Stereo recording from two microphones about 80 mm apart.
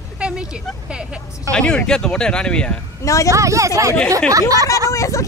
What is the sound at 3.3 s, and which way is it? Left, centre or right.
Speech, right.